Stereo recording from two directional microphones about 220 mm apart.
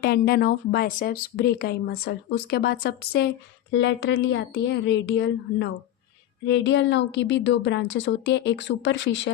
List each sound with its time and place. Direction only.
0.0 s speech: 45° left (ahead or behind)